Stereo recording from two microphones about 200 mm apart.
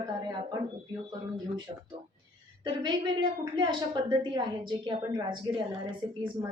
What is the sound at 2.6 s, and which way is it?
A woman's voice, 25° right (ahead or behind).